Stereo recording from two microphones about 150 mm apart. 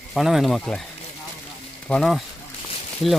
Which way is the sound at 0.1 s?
Centre (ahead or behind).